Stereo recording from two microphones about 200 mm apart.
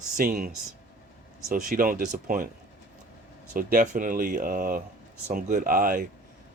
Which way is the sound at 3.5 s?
45° right (ahead or behind).